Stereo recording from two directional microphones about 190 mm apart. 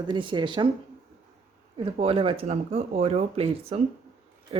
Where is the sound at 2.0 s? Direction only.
30° right (ahead or behind).